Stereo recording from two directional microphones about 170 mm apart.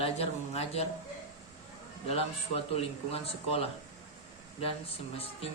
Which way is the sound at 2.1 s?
35° left (ahead or behind).